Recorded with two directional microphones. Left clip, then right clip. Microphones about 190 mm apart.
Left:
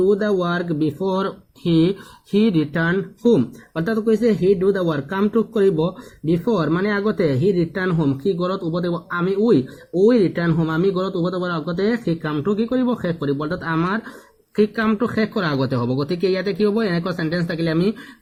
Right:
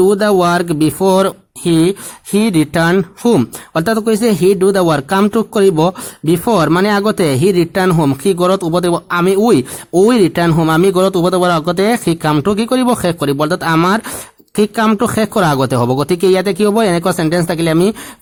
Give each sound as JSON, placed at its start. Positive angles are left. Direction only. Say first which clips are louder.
{"t": 0.1, "sound": "speech", "louder": "right 8 dB", "side_deg": -45}